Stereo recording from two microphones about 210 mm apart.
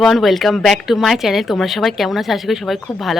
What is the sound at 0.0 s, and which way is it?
Speech, centre (ahead or behind).